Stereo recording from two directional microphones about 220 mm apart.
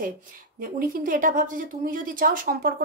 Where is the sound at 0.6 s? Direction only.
40° right (ahead or behind).